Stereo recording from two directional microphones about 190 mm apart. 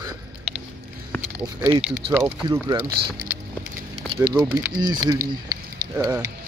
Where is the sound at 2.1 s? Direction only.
20° right (ahead or behind).